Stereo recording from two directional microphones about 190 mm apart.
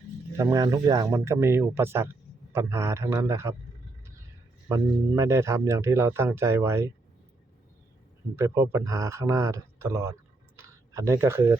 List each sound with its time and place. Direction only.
0.3 s speech: 20° right (ahead or behind)
4.7 s speech: 15° right (ahead or behind)
8.4 s speech: 15° right (ahead or behind)
10.6 s a sound: 15° right (ahead or behind)